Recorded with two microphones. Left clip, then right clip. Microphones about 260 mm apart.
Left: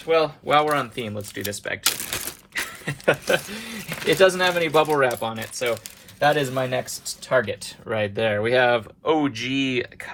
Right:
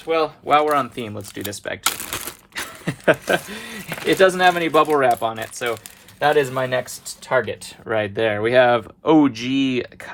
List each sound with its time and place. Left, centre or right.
0.0 s speech: right
3.2 s speech: right
7.9 s speech: right